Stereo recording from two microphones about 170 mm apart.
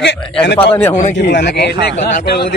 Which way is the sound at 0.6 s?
10° left (ahead or behind).